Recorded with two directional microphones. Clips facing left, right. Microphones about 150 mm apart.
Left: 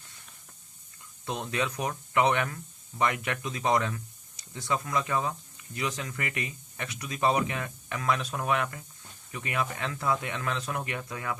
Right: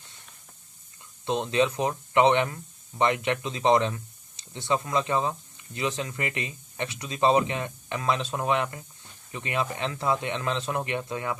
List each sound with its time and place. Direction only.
1.2 s speech: 25° right (ahead or behind)